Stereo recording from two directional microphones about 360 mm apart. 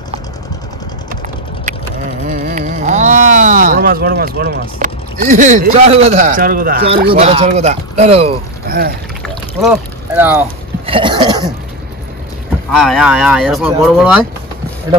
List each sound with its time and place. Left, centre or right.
2.2 s speech: right
9.2 s boat: centre
10.9 s cough: centre
12.7 s speech: centre